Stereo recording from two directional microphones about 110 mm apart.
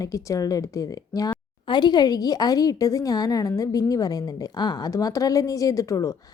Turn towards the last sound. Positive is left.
turn(degrees=30)  # may be behind; listen again after turning